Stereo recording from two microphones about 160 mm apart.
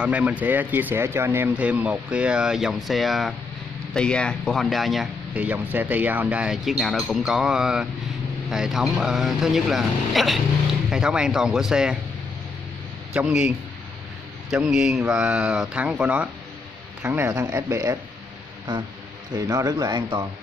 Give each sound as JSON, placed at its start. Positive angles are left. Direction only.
{"t": 0.0, "sound": "speech", "side_deg": -10}
{"t": 13.1, "sound": "speech", "side_deg": -5}
{"t": 14.5, "sound": "speech", "side_deg": -5}